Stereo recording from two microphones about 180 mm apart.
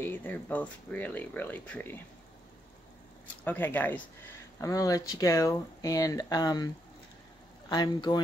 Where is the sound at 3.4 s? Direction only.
10° left (ahead or behind).